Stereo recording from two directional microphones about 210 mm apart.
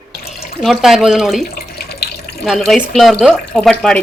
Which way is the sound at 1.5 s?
45° left (ahead or behind).